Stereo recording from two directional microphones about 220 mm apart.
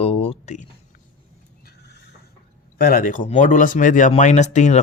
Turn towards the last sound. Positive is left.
turn(degrees=30)  # may be behind; listen again after turning